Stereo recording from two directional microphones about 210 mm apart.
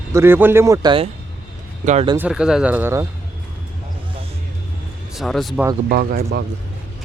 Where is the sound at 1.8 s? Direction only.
35° right (ahead or behind).